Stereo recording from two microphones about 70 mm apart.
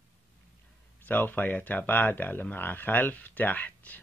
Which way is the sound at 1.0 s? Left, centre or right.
Left.